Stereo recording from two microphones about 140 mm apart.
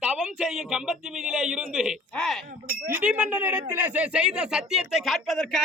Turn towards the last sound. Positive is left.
turn(degrees=0)  # may be behind; listen again after turning